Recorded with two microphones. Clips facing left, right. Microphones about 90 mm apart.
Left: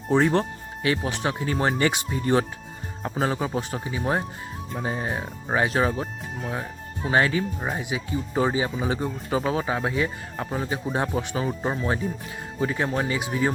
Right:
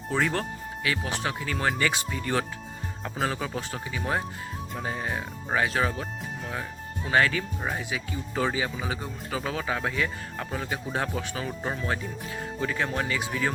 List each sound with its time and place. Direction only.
0.1 s speech: 25° left (ahead or behind)